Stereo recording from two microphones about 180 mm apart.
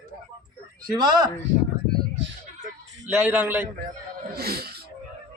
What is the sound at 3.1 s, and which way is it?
Speech, 10° right (ahead or behind).